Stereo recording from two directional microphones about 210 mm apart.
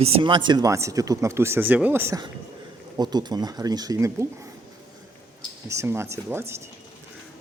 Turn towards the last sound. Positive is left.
turn(degrees=-10)  # may be behind; listen again after turning